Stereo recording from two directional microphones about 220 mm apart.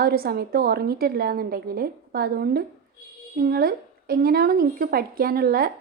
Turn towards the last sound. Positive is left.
turn(degrees=-40)  # may be behind; listen again after turning